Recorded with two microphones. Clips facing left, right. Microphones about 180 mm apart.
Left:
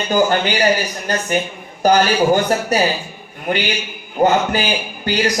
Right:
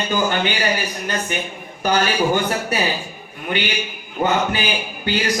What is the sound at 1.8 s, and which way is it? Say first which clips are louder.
Speech: left 5 dB; 40° left (ahead or behind).